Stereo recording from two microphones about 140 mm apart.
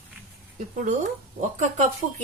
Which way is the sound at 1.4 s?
60° right (ahead or behind).